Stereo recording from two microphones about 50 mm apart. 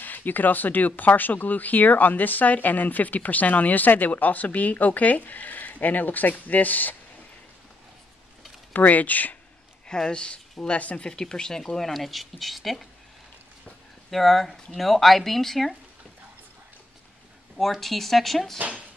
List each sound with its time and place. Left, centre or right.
0.0 s speech: left
8.7 s speech: left
9.8 s speech: centre
11.1 s speech: centre
14.1 s speech: centre
17.6 s speech: centre